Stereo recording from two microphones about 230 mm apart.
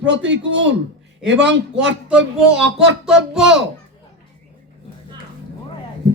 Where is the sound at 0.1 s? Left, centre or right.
Right.